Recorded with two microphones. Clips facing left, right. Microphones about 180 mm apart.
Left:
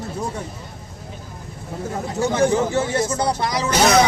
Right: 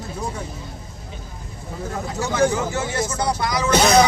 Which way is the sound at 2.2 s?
30° left (ahead or behind).